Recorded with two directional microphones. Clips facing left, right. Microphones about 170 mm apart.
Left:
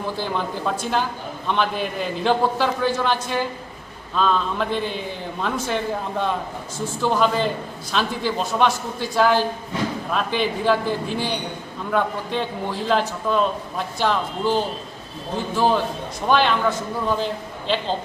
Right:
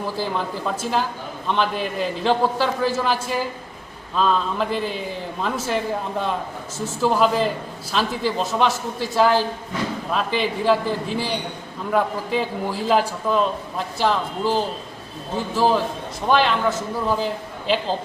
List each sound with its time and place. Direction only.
0.2 s a man's voice: 5° right (ahead or behind)